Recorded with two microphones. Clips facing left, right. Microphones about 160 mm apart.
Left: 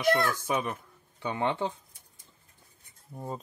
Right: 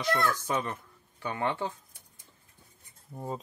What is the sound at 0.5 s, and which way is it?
Speech, 15° left (ahead or behind).